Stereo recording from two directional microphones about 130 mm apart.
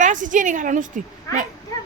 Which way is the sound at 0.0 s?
75° right (ahead or behind).